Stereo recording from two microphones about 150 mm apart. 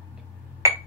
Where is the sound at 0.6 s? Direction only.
20° right (ahead or behind).